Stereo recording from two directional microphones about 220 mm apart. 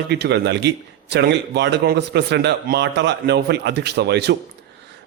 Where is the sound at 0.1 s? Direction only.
50° right (ahead or behind).